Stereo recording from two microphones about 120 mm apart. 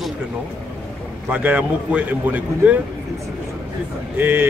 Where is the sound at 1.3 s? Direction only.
10° right (ahead or behind).